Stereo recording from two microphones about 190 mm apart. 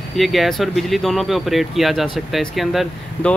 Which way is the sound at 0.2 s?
Centre (ahead or behind).